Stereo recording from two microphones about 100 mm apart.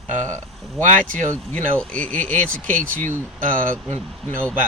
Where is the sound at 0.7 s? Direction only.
15° left (ahead or behind).